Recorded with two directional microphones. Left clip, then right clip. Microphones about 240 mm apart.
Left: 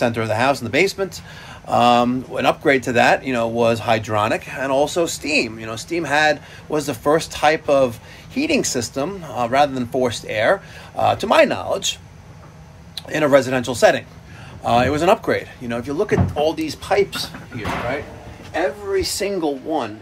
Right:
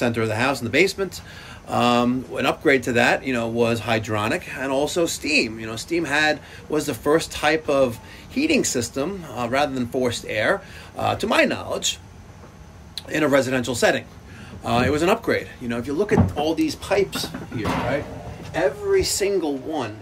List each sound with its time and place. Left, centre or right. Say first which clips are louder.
0.0 s speech: left 3 dB; centre
18.9 s speech: even; centre